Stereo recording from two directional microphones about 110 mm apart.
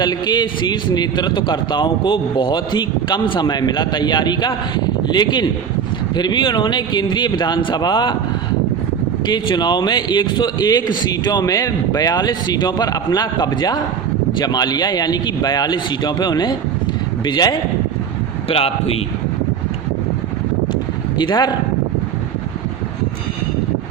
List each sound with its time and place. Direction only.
0.0 s a man's voice: 40° left (ahead or behind)
9.2 s a man's voice: 40° left (ahead or behind)
18.4 s a man's voice: 65° left (ahead or behind)
21.2 s a man's voice: 40° left (ahead or behind)